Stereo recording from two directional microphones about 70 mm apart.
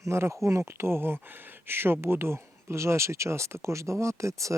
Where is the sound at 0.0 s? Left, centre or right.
Right.